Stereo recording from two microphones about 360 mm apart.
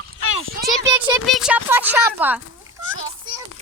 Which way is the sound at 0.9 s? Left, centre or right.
Centre.